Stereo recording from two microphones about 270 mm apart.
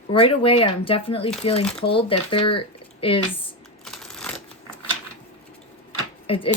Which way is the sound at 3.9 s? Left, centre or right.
Centre.